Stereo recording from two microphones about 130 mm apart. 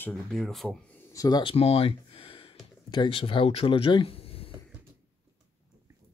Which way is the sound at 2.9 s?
40° left (ahead or behind).